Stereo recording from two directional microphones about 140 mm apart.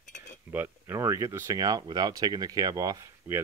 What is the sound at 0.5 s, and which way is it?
Speech, 15° right (ahead or behind).